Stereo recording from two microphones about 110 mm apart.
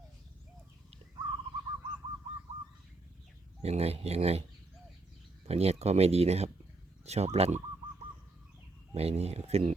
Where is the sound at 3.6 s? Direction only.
75° right (ahead or behind).